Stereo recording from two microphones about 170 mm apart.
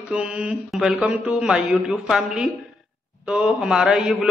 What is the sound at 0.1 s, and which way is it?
A man's voice, 5° right (ahead or behind).